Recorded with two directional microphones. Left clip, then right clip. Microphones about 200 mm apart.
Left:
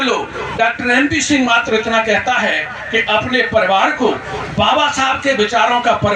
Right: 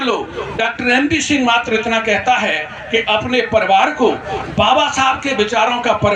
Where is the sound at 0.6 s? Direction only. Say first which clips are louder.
Left 2 dB; 40° right (ahead or behind).